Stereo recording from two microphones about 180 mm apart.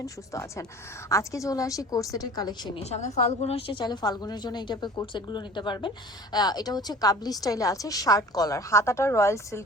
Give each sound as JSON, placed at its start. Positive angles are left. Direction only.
{"t": 0.0, "sound": "a woman's voice", "side_deg": 15}
{"t": 2.9, "sound": "a woman's voice", "side_deg": 40}